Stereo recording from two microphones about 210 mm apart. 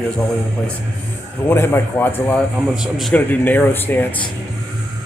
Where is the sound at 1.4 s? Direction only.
10° left (ahead or behind).